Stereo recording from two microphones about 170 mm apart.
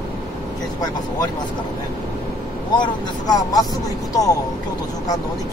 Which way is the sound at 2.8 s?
25° left (ahead or behind).